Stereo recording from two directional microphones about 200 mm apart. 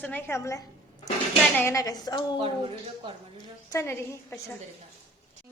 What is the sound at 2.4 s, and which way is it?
Speech, 25° right (ahead or behind).